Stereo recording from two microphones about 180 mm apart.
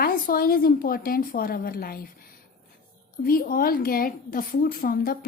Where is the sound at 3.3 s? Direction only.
55° left (ahead or behind).